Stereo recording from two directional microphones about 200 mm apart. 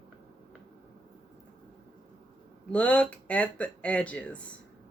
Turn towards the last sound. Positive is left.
turn(degrees=5)  # may be behind; listen again after turning